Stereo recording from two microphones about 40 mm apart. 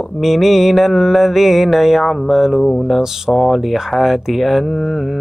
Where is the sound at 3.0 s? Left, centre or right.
Centre.